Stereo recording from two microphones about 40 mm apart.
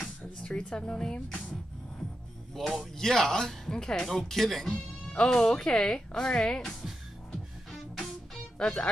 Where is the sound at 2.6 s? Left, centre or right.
Centre.